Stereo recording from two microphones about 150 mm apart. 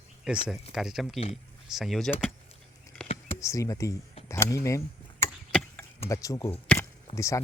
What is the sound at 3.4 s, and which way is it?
Speech, 20° left (ahead or behind).